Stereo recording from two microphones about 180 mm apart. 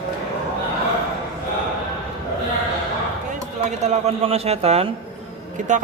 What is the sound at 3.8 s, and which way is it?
A man's voice, 35° right (ahead or behind).